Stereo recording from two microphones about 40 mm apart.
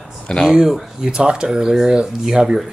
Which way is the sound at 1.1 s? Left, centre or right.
Right.